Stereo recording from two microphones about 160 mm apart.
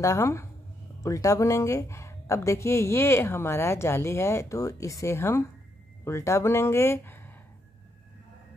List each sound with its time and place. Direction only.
0.0 s a woman's voice: 20° left (ahead or behind)